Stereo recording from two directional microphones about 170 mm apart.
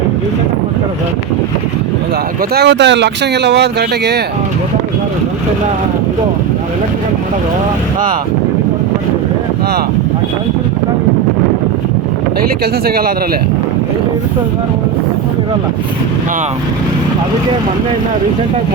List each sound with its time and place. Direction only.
2.5 s speech: 80° right
12.4 s speech: 60° right (ahead or behind)